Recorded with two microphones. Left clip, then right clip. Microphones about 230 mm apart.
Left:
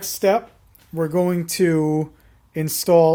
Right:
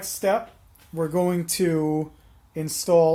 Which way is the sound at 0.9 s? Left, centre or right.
Left.